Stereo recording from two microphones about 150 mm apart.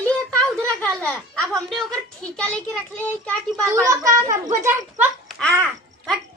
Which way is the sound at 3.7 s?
20° right (ahead or behind).